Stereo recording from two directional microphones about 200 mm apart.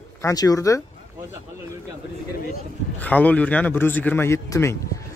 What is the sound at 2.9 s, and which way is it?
Speech, 5° left (ahead or behind).